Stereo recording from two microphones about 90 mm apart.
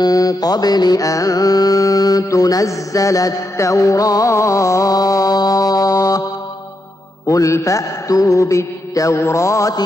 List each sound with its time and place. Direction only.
0.0 s mantra: 40° left (ahead or behind)
7.2 s mantra: 35° left (ahead or behind)